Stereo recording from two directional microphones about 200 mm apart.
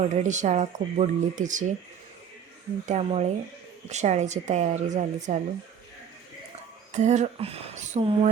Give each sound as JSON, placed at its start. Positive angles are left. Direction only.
{"t": 0.0, "sound": "speech", "side_deg": -35}
{"t": 2.8, "sound": "speech", "side_deg": -35}
{"t": 6.9, "sound": "speech", "side_deg": -35}